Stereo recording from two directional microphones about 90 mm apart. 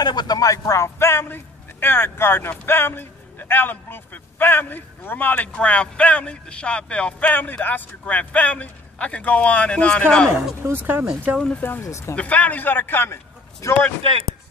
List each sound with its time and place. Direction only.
0.0 s a man's voice: 50° left (ahead or behind); by 10.3 s 10° left (ahead or behind)
10.6 s speech: 25° right (ahead or behind)
11.6 s speech: 30° left (ahead or behind)
12.2 s a man's voice: 15° left (ahead or behind)